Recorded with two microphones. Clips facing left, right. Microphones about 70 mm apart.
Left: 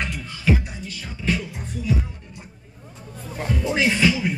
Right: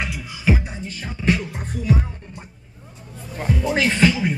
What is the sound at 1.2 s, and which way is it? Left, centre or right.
Music, right.